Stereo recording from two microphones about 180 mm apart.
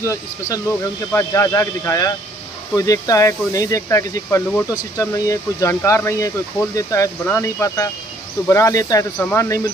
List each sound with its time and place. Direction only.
0.0 s speech: 20° left (ahead or behind)